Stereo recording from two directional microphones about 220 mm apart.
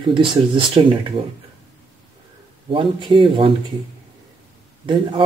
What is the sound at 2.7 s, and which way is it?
Speech, 20° right (ahead or behind).